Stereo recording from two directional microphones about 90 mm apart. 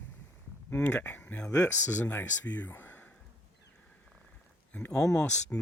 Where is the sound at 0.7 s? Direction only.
15° left (ahead or behind).